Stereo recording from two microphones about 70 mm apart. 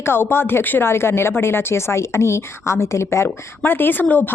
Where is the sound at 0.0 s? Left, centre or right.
Left.